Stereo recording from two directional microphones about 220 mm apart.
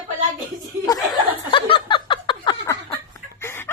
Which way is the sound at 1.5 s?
20° left (ahead or behind).